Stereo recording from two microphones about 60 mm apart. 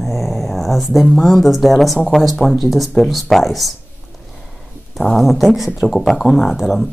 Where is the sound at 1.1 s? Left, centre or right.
Centre.